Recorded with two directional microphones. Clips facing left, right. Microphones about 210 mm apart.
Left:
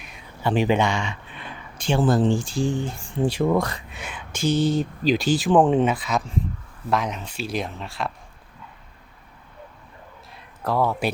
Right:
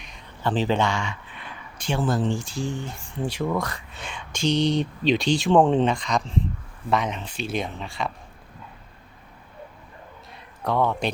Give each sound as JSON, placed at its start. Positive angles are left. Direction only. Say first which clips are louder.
{"t": 0.0, "sound": "a sound", "louder": "left 1 dB", "side_deg": 5}
{"t": 1.8, "sound": "speech", "louder": "left 5 dB", "side_deg": 30}
{"t": 3.9, "sound": "speech", "louder": "left 1 dB", "side_deg": 5}
{"t": 10.6, "sound": "speech", "louder": "left 1 dB", "side_deg": 0}